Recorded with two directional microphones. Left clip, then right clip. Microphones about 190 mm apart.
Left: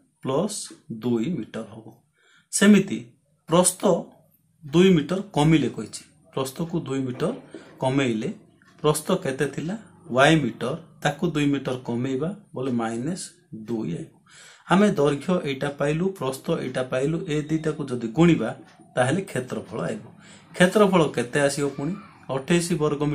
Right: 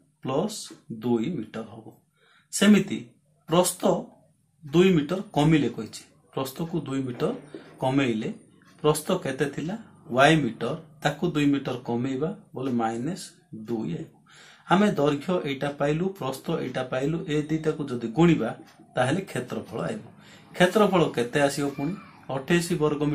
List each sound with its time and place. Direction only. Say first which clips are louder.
0.2 s speech: left 2 dB; 15° left (ahead or behind)